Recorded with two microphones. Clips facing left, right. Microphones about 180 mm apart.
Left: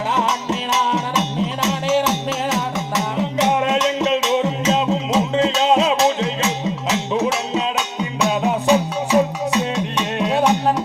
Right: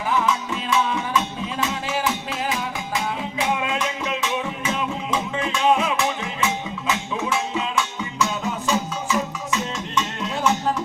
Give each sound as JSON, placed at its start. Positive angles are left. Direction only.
{"t": 0.1, "sound": "music", "side_deg": 80}
{"t": 8.2, "sound": "music", "side_deg": 65}